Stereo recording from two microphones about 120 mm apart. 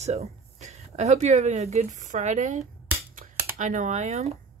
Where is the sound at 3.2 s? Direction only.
90° right.